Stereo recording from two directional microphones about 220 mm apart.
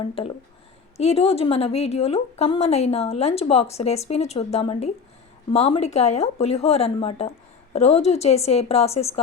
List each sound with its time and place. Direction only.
0.0 s a woman's voice: 25° left (ahead or behind)